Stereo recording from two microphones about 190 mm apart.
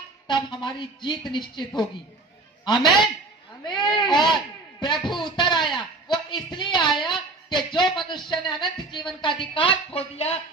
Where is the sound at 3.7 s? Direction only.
25° left (ahead or behind).